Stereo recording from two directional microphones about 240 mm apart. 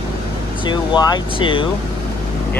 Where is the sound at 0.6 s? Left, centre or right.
Centre.